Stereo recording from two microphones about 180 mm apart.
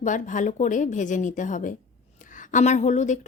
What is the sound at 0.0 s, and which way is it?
A woman's voice, 45° left (ahead or behind).